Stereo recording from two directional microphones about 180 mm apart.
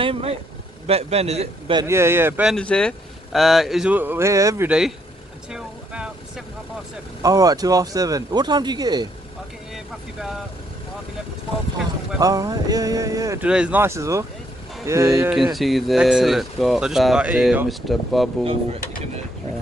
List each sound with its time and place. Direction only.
0.0 s a man's voice: 30° right (ahead or behind)
1.8 s speech: 15° right (ahead or behind)
2.5 s speech: 5° left (ahead or behind); by 4.6 s 15° right (ahead or behind)
4.6 s speech: 5° right (ahead or behind)
5.5 s vehicle: 5° right (ahead or behind)
7.2 s speech: 20° right (ahead or behind)
12.2 s speech: 20° right (ahead or behind)
13.5 s speech: 5° right (ahead or behind)
15.2 s speech: centre (ahead or behind)
18.4 s a man's voice: 30° right (ahead or behind)